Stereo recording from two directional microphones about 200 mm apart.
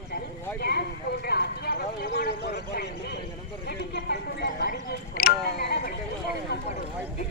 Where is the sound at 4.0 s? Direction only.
55° left (ahead or behind).